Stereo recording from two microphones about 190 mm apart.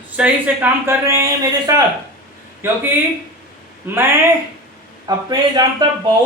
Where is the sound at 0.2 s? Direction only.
10° right (ahead or behind).